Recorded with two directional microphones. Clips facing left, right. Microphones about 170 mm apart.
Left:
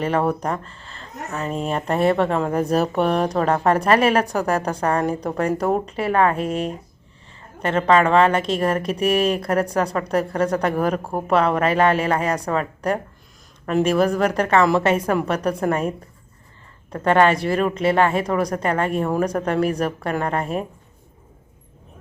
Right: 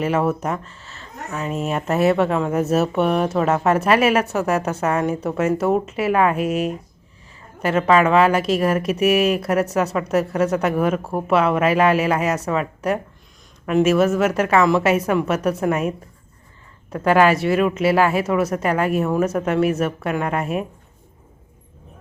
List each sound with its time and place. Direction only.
0.0 s speech: 5° right (ahead or behind)
7.6 s speech: 5° right (ahead or behind)
16.9 s speech: 5° right (ahead or behind)
20.4 s speech: 30° left (ahead or behind)